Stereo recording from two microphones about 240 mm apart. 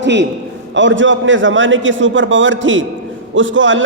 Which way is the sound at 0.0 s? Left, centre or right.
Right.